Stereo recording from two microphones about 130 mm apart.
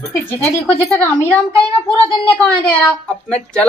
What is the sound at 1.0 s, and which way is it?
A man's voice, 10° left (ahead or behind).